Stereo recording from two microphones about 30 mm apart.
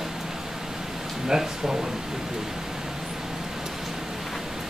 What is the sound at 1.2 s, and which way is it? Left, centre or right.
Speech, centre.